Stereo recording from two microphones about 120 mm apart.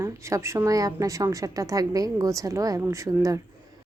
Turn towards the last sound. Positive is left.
turn(degrees=-25)  # may be behind; listen again after turning